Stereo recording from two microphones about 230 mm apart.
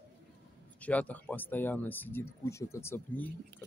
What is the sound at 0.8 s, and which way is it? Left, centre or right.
Speech, centre.